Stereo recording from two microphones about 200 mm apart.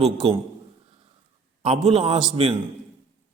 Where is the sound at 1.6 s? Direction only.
25° right (ahead or behind).